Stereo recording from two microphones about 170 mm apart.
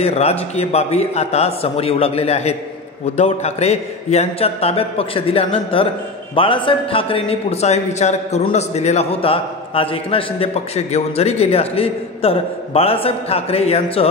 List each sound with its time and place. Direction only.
0.0 s a man's voice: 40° left (ahead or behind)